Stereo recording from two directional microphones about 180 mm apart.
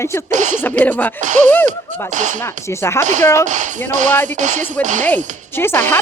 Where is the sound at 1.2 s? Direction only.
45° right (ahead or behind).